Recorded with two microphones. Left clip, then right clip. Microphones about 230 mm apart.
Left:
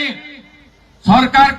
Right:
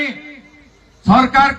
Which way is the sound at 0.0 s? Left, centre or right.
Left.